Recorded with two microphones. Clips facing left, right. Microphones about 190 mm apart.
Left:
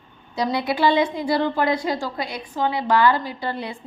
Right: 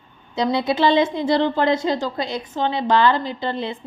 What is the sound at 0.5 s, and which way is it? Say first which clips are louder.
A woman's voice: right 2 dB; 20° right (ahead or behind).